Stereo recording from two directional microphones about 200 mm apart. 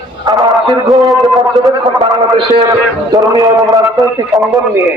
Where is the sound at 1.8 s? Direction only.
25° right (ahead or behind).